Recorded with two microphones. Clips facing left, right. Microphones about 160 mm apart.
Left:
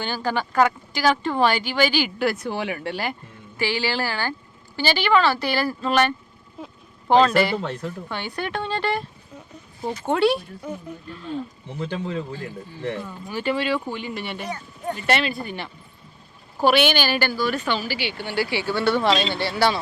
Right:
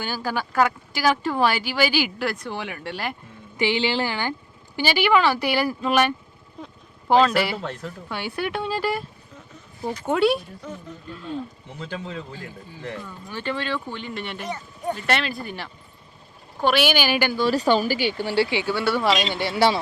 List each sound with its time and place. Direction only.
0.0 s speech: 5° right (ahead or behind)
3.6 s speech: 20° right (ahead or behind)
6.6 s speech: 5° left (ahead or behind)
10.1 s speech: centre (ahead or behind)
10.6 s speech: 10° left (ahead or behind)
11.1 s speech: centre (ahead or behind)
13.0 s speech: 15° left (ahead or behind); by 17.4 s 15° right (ahead or behind)
17.4 s speech: 35° right (ahead or behind)
18.3 s speech: 20° right (ahead or behind)